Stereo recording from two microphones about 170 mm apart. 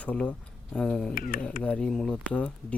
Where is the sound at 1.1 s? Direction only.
55° left (ahead or behind).